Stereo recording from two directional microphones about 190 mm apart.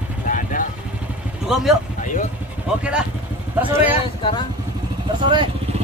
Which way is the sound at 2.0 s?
40° left (ahead or behind).